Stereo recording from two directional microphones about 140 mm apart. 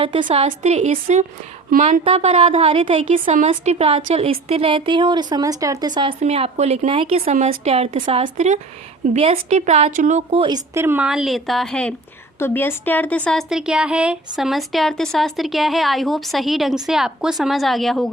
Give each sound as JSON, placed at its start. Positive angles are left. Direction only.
{"t": 0.0, "sound": "speech", "side_deg": -40}
{"t": 0.6, "sound": "a woman's voice", "side_deg": -55}
{"t": 3.4, "sound": "speech", "side_deg": -50}
{"t": 6.2, "sound": "speech", "side_deg": -45}
{"t": 10.3, "sound": "speech", "side_deg": -35}
{"t": 10.8, "sound": "a woman's voice", "side_deg": -15}
{"t": 11.0, "sound": "a woman's voice", "side_deg": -5}
{"t": 13.5, "sound": "a woman's voice", "side_deg": -5}